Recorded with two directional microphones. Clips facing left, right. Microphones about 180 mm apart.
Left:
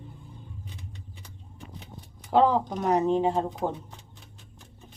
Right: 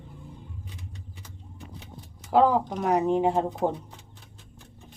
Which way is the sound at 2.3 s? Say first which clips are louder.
Right 1 dB; 5° right (ahead or behind).